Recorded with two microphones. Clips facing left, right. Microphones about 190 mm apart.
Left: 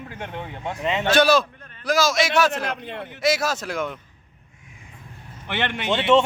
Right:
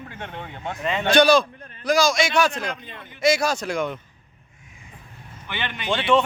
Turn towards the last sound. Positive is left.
turn(degrees=25)  # may be behind; listen again after turning